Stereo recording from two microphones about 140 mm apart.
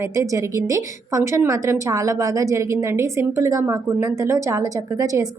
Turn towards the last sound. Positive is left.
turn(degrees=-25)  # may be behind; listen again after turning